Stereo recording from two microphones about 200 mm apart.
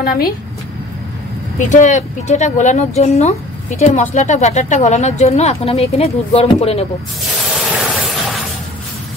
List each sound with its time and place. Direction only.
1.6 s speech: 35° left (ahead or behind)
7.5 s vehicle: centre (ahead or behind)